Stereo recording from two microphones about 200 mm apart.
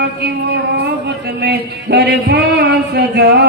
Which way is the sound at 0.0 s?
55° right (ahead or behind).